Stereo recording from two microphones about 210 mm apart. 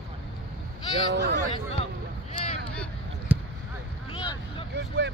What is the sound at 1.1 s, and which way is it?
Speech, 55° right (ahead or behind).